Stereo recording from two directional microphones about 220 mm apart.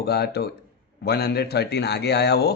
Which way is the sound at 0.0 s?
45° left (ahead or behind).